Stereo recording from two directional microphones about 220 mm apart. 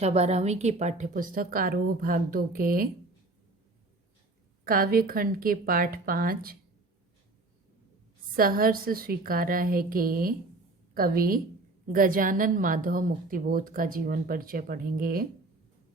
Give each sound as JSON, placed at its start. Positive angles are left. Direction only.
{"t": 0.0, "sound": "a woman's voice", "side_deg": -30}
{"t": 4.6, "sound": "a woman's voice", "side_deg": -40}
{"t": 8.4, "sound": "a woman's voice", "side_deg": -40}